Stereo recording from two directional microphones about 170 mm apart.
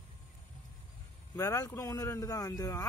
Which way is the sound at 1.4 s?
20° left (ahead or behind).